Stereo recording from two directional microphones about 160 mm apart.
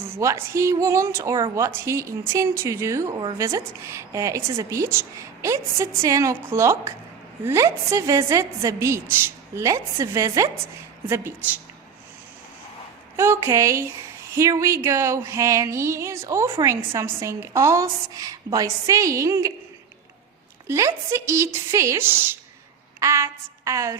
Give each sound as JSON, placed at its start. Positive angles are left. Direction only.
{"t": 0.0, "sound": "a woman's voice", "side_deg": -15}
{"t": 13.1, "sound": "a woman's voice", "side_deg": -15}
{"t": 20.7, "sound": "a woman's voice", "side_deg": -15}
{"t": 23.0, "sound": "a sound", "side_deg": -15}